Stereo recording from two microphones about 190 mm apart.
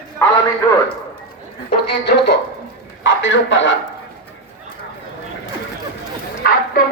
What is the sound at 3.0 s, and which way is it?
Speech, 75° left (ahead or behind).